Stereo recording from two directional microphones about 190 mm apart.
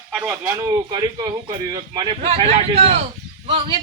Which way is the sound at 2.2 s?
30° right (ahead or behind).